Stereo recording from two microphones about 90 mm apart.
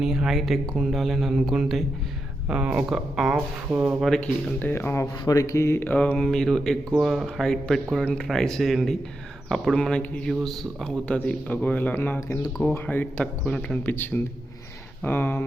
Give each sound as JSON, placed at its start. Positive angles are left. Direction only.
{"t": 0.0, "sound": "speech", "side_deg": -5}
{"t": 3.7, "sound": "speech", "side_deg": -20}
{"t": 4.0, "sound": "speech", "side_deg": 5}
{"t": 4.6, "sound": "speech", "side_deg": 25}
{"t": 5.2, "sound": "a man's voice", "side_deg": 40}
{"t": 13.8, "sound": "speech", "side_deg": 20}